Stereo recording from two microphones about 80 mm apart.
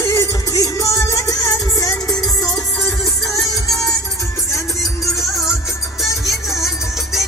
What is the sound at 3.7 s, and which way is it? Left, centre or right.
Music, left.